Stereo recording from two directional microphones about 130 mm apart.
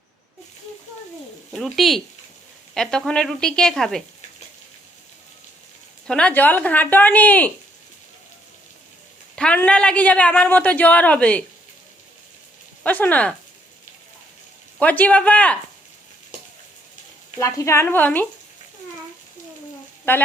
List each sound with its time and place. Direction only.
1.5 s a woman's voice: centre (ahead or behind)
6.1 s speech: 10° left (ahead or behind)
9.3 s speech: 10° left (ahead or behind)
12.8 s speech: 10° left (ahead or behind)
14.8 s speech: 10° left (ahead or behind)
17.4 s speech: 20° left (ahead or behind)
20.1 s speech: 15° left (ahead or behind)